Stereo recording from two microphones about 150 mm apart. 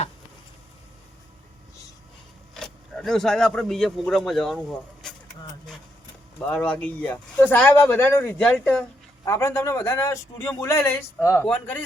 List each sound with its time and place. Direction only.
2.6 s speech: 5° left (ahead or behind)
6.4 s a man's voice: 10° left (ahead or behind)